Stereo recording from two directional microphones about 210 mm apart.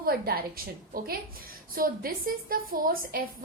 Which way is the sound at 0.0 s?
45° right (ahead or behind).